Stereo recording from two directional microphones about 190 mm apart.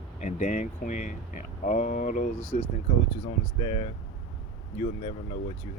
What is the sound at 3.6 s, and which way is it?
Speech, 30° left (ahead or behind).